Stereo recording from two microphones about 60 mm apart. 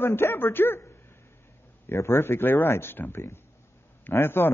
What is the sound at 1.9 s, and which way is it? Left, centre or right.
A man's voice, left.